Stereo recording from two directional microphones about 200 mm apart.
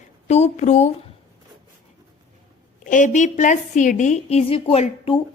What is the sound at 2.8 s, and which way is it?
A woman's voice, 40° left (ahead or behind).